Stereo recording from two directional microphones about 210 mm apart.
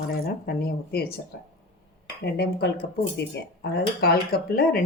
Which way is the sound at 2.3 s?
50° left (ahead or behind).